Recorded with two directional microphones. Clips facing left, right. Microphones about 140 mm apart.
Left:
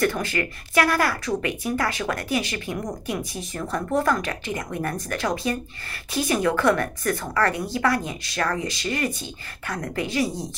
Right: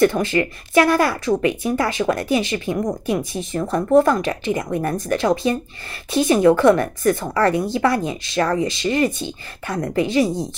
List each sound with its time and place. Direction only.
0.0 s speech: 25° right (ahead or behind)